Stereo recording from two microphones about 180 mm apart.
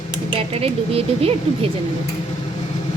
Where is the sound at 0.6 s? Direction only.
35° right (ahead or behind).